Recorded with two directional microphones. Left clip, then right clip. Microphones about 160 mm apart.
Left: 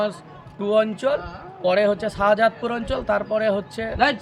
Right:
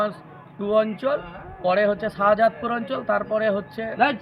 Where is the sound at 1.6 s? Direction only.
25° left (ahead or behind).